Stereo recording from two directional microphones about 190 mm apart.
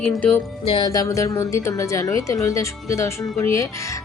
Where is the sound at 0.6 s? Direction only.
25° left (ahead or behind).